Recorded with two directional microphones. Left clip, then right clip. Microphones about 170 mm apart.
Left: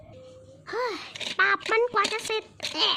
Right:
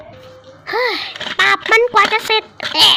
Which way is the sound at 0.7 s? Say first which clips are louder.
Right 12 dB; 30° left (ahead or behind).